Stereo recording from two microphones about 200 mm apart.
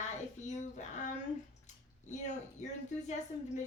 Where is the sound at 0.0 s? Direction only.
35° left (ahead or behind).